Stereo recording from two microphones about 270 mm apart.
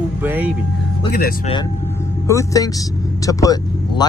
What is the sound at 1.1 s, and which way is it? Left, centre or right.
Speech, left.